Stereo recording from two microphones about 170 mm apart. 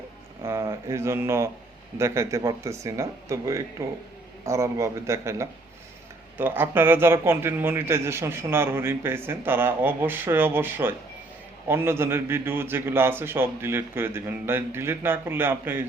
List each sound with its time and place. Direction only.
0.4 s a man's voice: 15° right (ahead or behind)